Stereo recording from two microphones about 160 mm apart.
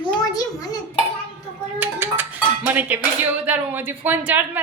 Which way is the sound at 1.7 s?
10° right (ahead or behind).